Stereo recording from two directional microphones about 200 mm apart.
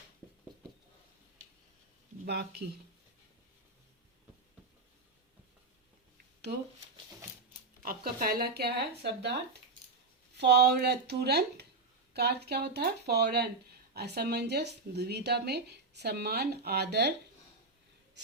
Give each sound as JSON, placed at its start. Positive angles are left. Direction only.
{"t": 2.2, "sound": "speech", "side_deg": -55}
{"t": 7.8, "sound": "speech", "side_deg": -45}
{"t": 10.3, "sound": "speech", "side_deg": -55}